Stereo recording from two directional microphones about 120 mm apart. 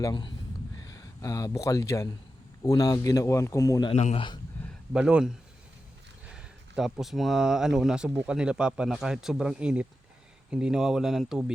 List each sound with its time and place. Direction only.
0.0 s a man's voice: 40° left (ahead or behind)
3.9 s a man's voice: 70° left (ahead or behind)
4.9 s speech: 10° right (ahead or behind)